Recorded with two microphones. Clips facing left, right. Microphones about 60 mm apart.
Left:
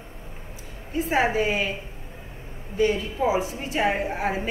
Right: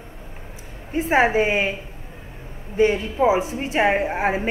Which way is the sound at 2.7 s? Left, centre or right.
Right.